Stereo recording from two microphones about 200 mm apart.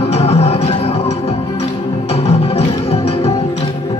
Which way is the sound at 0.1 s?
30° left (ahead or behind).